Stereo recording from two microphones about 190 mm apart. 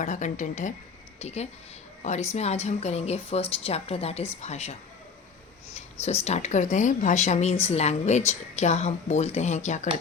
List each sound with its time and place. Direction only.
0.0 s a woman's voice: 40° left (ahead or behind)